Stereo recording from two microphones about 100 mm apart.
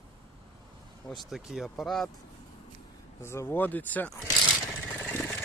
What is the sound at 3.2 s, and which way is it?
Speech, 25° left (ahead or behind).